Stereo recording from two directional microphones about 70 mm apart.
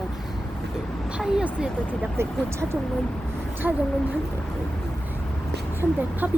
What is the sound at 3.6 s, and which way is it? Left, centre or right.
Speech, right.